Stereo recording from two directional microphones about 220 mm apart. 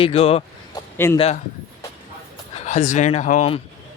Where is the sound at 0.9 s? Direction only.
10° left (ahead or behind).